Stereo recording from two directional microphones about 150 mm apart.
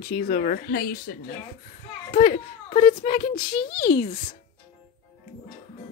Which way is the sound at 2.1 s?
50° left (ahead or behind).